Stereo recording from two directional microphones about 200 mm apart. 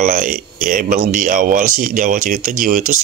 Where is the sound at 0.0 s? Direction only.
40° right (ahead or behind).